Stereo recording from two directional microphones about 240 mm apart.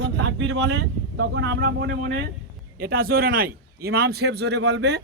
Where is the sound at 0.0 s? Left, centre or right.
Right.